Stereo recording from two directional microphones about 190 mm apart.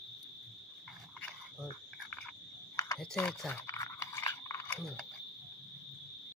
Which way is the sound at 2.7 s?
15° left (ahead or behind).